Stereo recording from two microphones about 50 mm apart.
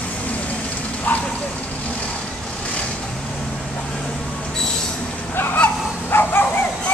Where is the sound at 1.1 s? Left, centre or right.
Left.